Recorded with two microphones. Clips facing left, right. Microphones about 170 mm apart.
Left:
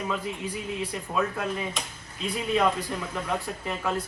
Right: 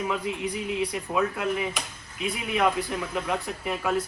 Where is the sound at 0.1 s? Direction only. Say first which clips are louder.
Right 2 dB; 15° right (ahead or behind).